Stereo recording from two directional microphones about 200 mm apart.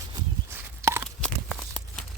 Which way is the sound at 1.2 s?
5° left (ahead or behind).